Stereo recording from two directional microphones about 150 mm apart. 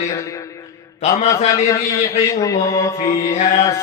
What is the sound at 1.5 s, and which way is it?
Mantra, 20° left (ahead or behind).